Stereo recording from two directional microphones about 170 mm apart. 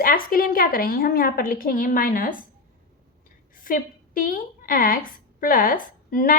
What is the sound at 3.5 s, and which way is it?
A woman's voice, 55° left (ahead or behind).